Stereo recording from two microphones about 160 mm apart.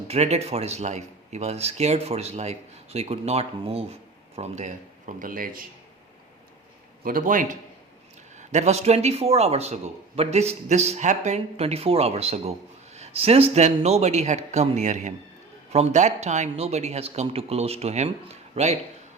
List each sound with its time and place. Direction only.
0.1 s speech: 40° right (ahead or behind); by 5.6 s 60° right (ahead or behind)
7.0 s speech: 60° right (ahead or behind); by 18.8 s 40° right (ahead or behind)